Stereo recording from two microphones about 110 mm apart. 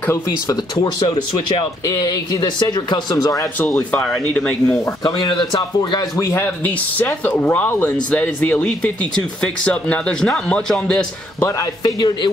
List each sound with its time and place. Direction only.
0.0 s speech: 25° left (ahead or behind)
0.7 s speech: 40° left (ahead or behind)
4.2 s a man's voice: 15° left (ahead or behind)
5.0 s a man's voice: 40° left (ahead or behind); by 11.1 s 5° left (ahead or behind)
11.3 s speech: 30° left (ahead or behind)